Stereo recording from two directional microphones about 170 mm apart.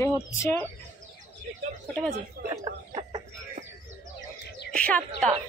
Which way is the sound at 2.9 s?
35° right (ahead or behind).